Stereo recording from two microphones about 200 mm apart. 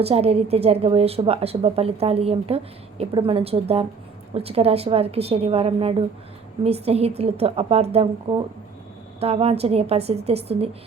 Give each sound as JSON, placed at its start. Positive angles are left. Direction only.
{"t": 0.0, "sound": "a woman's voice", "side_deg": -30}